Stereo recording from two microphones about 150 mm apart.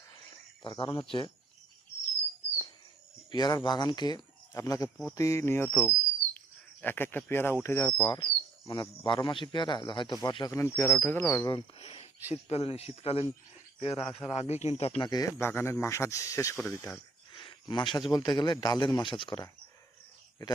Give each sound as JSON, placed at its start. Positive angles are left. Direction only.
{"t": 0.6, "sound": "speech", "side_deg": 30}
{"t": 3.3, "sound": "speech", "side_deg": 25}
{"t": 8.0, "sound": "a man's voice", "side_deg": 30}
{"t": 17.3, "sound": "cricket", "side_deg": 30}
{"t": 18.1, "sound": "speech", "side_deg": 30}